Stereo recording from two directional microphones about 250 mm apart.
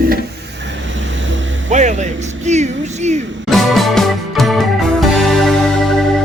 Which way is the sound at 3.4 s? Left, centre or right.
Centre.